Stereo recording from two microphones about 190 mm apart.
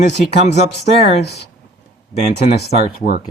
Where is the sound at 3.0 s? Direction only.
50° left (ahead or behind).